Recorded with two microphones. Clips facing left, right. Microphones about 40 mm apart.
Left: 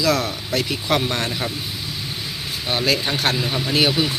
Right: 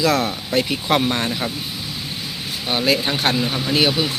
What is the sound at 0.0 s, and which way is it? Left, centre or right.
Speech, right.